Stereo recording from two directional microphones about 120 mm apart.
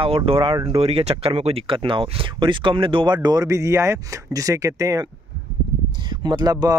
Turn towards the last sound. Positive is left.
turn(degrees=-35)  # may be behind; listen again after turning